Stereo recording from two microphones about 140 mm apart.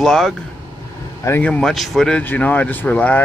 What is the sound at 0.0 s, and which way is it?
Speech, 5° left (ahead or behind).